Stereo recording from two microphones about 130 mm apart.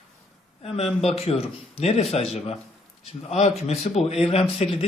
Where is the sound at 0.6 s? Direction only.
50° left (ahead or behind).